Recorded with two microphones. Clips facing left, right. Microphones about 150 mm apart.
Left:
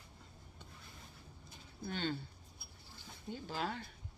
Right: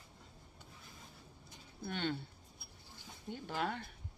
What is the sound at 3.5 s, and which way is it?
Speech, 60° right (ahead or behind).